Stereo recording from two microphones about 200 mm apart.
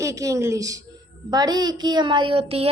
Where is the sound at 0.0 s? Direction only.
15° right (ahead or behind).